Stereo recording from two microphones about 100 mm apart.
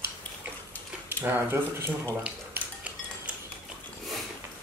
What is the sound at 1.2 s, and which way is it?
Speech, 25° right (ahead or behind).